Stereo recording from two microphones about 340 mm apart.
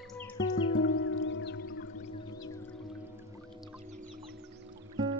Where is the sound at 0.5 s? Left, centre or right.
Left.